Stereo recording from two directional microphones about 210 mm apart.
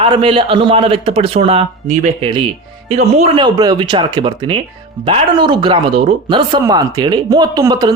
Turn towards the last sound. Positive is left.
turn(degrees=-20)  # may be behind; listen again after turning